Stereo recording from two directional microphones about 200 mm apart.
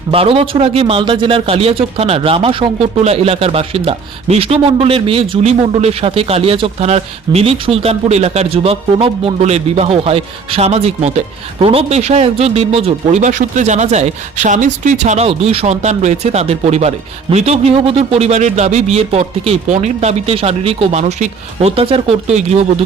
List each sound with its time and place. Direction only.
0.1 s speech: 30° right (ahead or behind)